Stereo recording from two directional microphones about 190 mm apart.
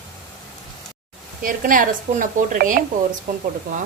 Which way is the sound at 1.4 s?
45° right (ahead or behind).